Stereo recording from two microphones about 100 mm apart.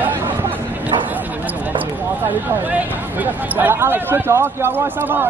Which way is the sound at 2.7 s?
20° right (ahead or behind).